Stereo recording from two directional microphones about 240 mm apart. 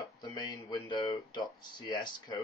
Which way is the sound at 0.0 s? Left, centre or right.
Centre.